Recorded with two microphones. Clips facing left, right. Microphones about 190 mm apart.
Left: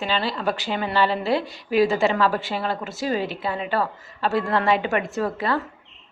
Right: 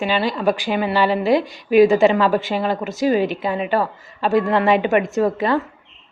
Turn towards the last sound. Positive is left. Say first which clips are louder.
# right 6 dB
turn(degrees=-20)  # may be behind; listen again after turning